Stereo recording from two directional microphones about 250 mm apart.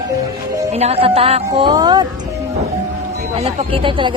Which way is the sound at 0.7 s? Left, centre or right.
Right.